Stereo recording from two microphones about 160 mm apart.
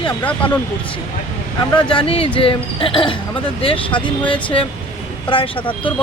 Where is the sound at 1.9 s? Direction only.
35° left (ahead or behind).